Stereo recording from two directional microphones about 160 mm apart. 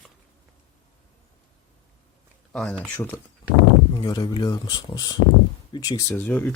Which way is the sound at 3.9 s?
25° left (ahead or behind).